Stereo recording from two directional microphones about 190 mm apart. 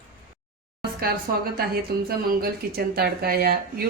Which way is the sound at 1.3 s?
50° right (ahead or behind).